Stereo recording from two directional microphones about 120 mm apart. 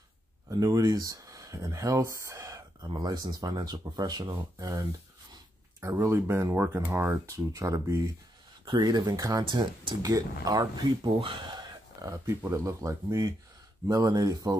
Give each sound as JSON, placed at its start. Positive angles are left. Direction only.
{"t": 0.5, "sound": "speech", "side_deg": -30}
{"t": 5.8, "sound": "speech", "side_deg": -25}
{"t": 8.6, "sound": "speech", "side_deg": -35}
{"t": 9.4, "sound": "speech", "side_deg": -45}
{"t": 11.1, "sound": "a sound", "side_deg": -40}
{"t": 12.1, "sound": "speech", "side_deg": -25}